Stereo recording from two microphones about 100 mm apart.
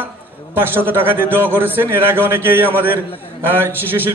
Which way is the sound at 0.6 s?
20° right (ahead or behind).